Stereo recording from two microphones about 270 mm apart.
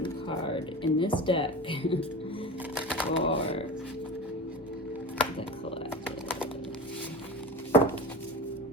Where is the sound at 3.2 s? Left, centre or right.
Left.